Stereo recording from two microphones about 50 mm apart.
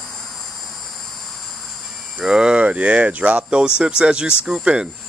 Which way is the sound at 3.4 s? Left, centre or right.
Centre.